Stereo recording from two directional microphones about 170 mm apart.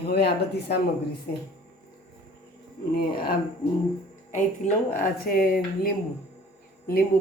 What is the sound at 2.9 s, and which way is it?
Speech, 65° left (ahead or behind).